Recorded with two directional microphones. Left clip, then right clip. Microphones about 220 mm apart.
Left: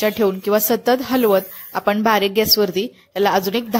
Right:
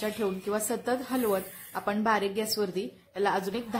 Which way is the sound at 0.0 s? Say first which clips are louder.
Left 13 dB; 35° left (ahead or behind).